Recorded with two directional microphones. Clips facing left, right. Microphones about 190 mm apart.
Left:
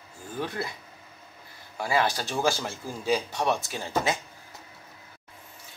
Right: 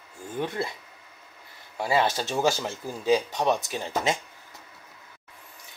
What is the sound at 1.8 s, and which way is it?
Speech, 20° right (ahead or behind).